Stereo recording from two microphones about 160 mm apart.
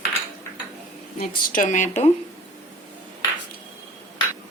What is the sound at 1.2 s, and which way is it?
Speech, 60° left (ahead or behind).